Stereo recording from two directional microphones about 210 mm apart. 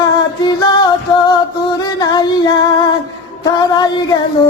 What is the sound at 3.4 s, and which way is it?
Female singing, 20° left (ahead or behind).